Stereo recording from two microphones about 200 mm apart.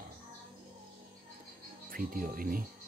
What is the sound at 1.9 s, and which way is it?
Speech, 45° right (ahead or behind).